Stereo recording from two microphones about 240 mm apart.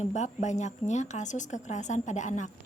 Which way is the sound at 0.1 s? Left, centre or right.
Left.